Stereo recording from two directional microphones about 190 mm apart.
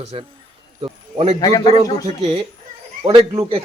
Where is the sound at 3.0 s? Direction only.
25° right (ahead or behind).